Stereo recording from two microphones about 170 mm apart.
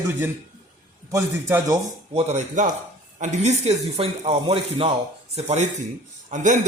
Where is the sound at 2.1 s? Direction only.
35° right (ahead or behind).